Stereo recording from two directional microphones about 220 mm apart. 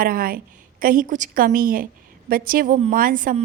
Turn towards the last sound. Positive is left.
turn(degrees=-40)  # may be behind; listen again after turning